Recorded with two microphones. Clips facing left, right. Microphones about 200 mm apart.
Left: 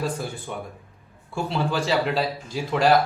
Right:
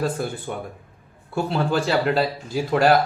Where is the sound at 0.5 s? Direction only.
40° right (ahead or behind).